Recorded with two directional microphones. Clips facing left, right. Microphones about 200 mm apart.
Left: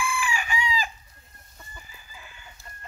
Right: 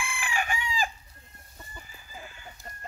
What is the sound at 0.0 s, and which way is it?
Chicken, 55° right (ahead or behind).